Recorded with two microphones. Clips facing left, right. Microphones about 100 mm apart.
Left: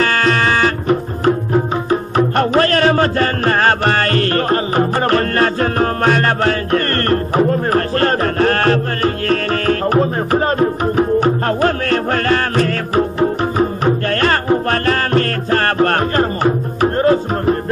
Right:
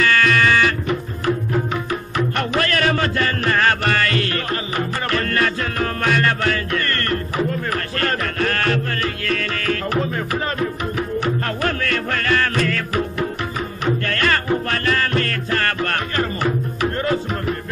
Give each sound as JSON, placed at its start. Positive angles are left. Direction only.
{"t": 0.0, "sound": "music", "side_deg": 35}